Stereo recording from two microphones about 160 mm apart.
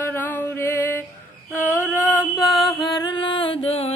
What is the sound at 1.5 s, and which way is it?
Music, 15° left (ahead or behind).